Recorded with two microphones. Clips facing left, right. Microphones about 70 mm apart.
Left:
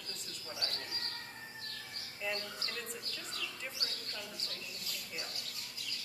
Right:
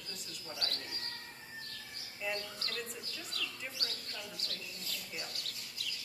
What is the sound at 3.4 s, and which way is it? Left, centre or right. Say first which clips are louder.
Speech: right 2 dB; left.